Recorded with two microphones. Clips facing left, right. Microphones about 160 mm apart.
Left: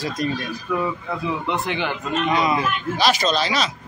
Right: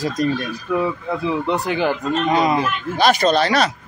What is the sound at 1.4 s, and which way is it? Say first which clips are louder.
Speech: right 6 dB; 40° right (ahead or behind).